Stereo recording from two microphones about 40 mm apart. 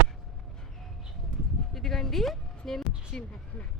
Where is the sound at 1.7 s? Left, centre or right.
Centre.